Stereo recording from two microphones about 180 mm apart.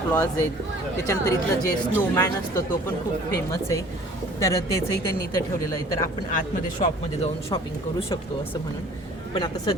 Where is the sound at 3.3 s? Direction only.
15° left (ahead or behind).